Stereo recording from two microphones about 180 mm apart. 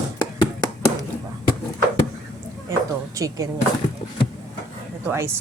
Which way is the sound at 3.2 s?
20° right (ahead or behind).